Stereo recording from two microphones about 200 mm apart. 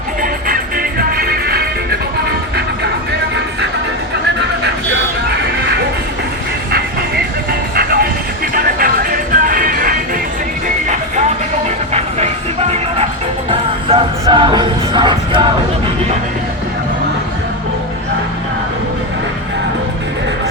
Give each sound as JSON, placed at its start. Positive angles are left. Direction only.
{"t": 0.2, "sound": "music", "side_deg": -45}
{"t": 7.8, "sound": "music", "side_deg": -50}
{"t": 11.9, "sound": "music", "side_deg": -30}
{"t": 13.9, "sound": "music", "side_deg": -30}